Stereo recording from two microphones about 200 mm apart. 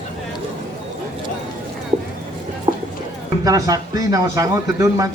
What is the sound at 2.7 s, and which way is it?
Music, 30° right (ahead or behind).